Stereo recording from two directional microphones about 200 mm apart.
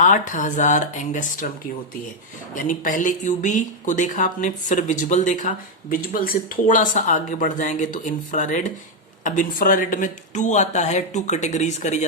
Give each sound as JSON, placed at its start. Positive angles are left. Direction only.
{"t": 0.0, "sound": "speech", "side_deg": 40}
{"t": 2.6, "sound": "speech", "side_deg": 40}